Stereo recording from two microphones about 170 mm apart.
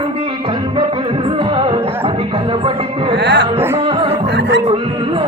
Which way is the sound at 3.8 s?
35° right (ahead or behind).